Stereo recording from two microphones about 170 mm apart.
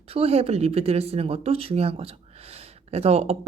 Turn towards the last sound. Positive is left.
turn(degrees=-35)  # may be behind; listen again after turning